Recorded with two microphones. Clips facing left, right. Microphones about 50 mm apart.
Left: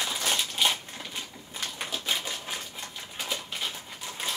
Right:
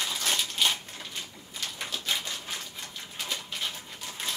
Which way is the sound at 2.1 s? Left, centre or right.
Centre.